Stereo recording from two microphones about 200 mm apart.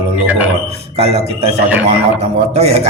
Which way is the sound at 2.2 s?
30° right (ahead or behind).